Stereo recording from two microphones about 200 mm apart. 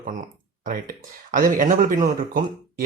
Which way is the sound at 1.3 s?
40° right (ahead or behind).